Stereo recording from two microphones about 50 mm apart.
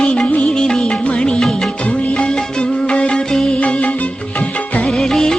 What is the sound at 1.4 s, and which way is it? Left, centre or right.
Music of bollywood, centre.